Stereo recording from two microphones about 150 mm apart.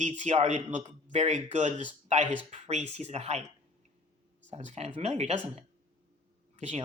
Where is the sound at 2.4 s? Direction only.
50° right (ahead or behind).